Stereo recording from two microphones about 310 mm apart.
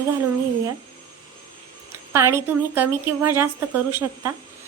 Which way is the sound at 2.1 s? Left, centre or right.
Centre.